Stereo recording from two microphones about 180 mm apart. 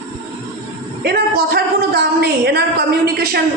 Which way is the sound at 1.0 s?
60° right (ahead or behind).